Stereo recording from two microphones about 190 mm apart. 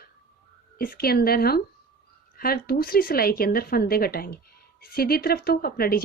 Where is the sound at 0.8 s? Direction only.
50° left (ahead or behind).